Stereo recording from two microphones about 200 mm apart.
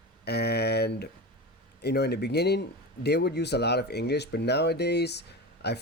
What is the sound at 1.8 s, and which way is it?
Speech, 55° left (ahead or behind).